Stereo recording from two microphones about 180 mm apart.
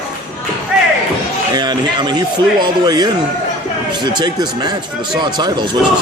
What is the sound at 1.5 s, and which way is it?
Speech, 25° right (ahead or behind).